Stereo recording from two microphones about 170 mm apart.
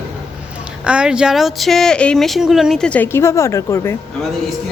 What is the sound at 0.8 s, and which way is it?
Speech, 5° right (ahead or behind).